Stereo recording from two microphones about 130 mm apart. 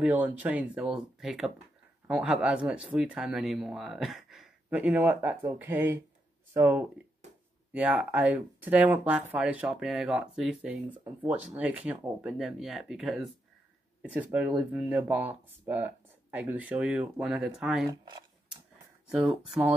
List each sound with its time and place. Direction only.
0.0 s speech: 10° right (ahead or behind)
14.0 s speech: 15° right (ahead or behind)
19.0 s speech: 5° right (ahead or behind)